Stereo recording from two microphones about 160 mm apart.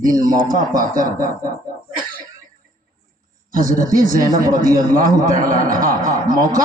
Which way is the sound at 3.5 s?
60° right (ahead or behind).